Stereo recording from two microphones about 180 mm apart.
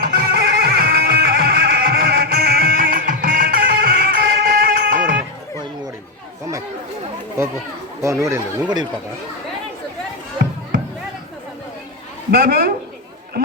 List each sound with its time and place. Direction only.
0.1 s neigh: 55° right (ahead or behind)
8.0 s speech: 15° right (ahead or behind)
12.3 s a woman's voice: 55° right (ahead or behind)